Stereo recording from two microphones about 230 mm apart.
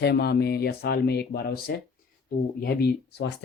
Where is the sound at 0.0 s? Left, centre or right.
Left.